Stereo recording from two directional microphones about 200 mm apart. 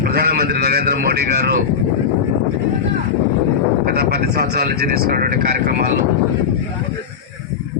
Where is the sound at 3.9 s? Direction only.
55° right (ahead or behind).